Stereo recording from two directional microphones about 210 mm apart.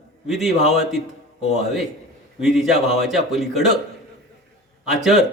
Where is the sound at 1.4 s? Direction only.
30° left (ahead or behind).